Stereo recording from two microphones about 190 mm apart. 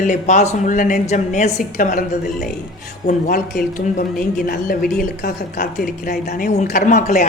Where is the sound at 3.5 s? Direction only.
45° left (ahead or behind).